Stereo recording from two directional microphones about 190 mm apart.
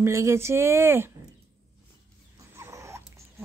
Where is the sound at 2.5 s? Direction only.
15° right (ahead or behind).